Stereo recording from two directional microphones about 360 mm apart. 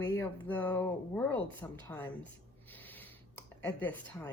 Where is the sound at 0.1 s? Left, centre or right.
Centre.